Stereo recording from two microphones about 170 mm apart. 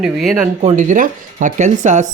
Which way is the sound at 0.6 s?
45° right (ahead or behind).